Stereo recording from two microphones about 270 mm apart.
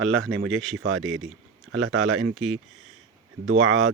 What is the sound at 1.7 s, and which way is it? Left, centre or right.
Speech, right.